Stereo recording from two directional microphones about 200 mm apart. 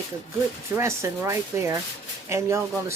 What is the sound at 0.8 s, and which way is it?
Speech, 15° right (ahead or behind).